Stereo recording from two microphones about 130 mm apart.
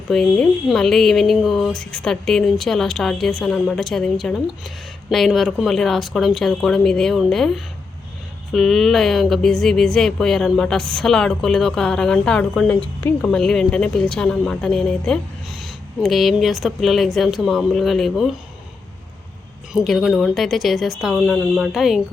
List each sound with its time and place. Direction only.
0.1 s speech: centre (ahead or behind)
13.0 s speech: 15° left (ahead or behind)
13.3 s speech: 5° left (ahead or behind)
19.7 s speech: centre (ahead or behind)